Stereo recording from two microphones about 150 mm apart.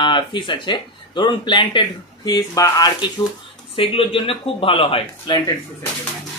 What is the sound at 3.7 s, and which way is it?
Speech, 35° left (ahead or behind).